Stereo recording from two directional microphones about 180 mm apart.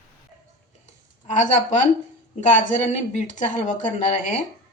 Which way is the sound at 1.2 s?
40° left (ahead or behind).